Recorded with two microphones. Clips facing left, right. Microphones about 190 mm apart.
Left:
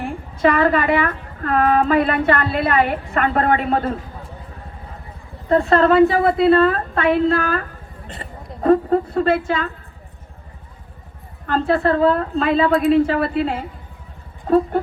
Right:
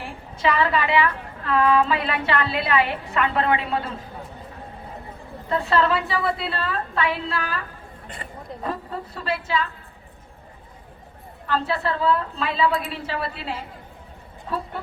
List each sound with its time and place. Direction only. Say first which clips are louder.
0.0 s a woman's voice: left 7 dB; 50° left (ahead or behind)
5.5 s a woman's voice: left 7 dB; 45° left (ahead or behind)
11.4 s a woman's voice: left 7 dB; 50° left (ahead or behind)